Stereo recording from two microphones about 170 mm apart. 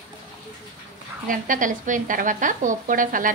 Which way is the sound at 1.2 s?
50° right (ahead or behind).